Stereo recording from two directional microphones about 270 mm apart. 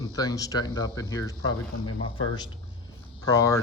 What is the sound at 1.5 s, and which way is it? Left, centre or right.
Speech, left.